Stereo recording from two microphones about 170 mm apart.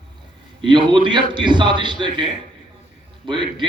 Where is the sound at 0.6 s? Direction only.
30° right (ahead or behind).